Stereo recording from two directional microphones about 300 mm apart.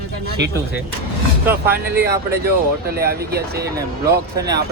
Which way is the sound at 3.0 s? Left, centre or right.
Right.